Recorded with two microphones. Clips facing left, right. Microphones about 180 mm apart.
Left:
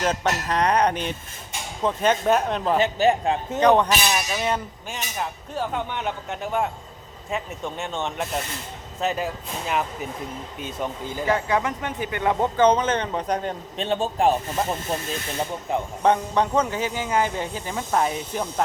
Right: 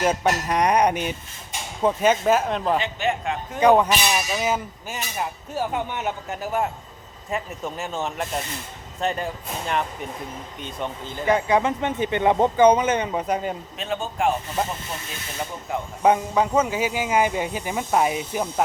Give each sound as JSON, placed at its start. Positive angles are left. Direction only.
{"t": 0.0, "sound": "speech", "side_deg": -10}
{"t": 2.7, "sound": "speech", "side_deg": 40}
{"t": 3.6, "sound": "speech", "side_deg": -10}
{"t": 11.3, "sound": "speech", "side_deg": -15}
{"t": 13.7, "sound": "speech", "side_deg": 30}
{"t": 15.7, "sound": "speech", "side_deg": 20}
{"t": 16.0, "sound": "speech", "side_deg": -5}